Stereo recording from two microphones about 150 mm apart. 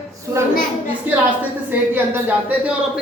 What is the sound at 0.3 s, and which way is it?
Speech, 20° right (ahead or behind).